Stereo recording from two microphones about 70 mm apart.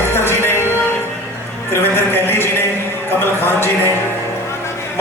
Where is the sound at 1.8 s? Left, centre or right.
Left.